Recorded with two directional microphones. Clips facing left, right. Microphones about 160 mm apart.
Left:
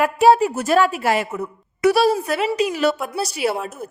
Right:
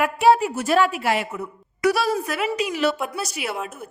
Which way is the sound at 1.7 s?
25° left (ahead or behind).